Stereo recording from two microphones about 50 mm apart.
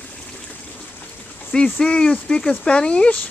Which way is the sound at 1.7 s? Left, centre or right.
Centre.